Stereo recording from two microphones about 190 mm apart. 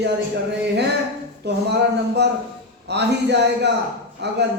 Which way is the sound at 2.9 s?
65° right (ahead or behind).